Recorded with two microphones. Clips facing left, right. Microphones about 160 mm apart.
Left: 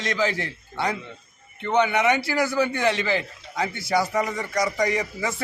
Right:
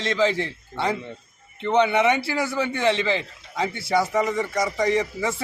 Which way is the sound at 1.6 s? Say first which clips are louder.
Right 2 dB; centre (ahead or behind).